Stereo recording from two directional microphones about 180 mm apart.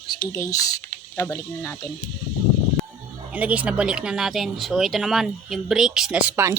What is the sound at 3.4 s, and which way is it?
Speech, 10° right (ahead or behind).